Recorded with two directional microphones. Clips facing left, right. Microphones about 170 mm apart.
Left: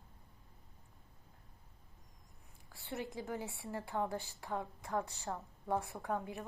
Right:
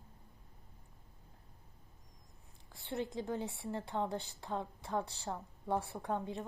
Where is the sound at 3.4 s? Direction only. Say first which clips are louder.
Right 3 dB; 20° right (ahead or behind).